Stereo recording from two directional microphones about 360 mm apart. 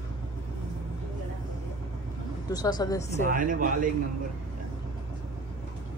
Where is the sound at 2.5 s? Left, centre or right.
Centre.